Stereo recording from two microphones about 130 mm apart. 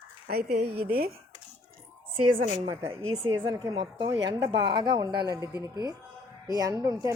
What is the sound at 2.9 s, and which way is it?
A woman's voice, 40° right (ahead or behind).